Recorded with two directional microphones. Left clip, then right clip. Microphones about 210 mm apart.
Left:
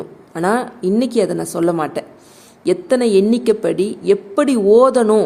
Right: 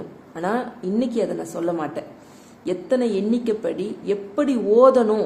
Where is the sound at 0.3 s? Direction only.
50° left (ahead or behind).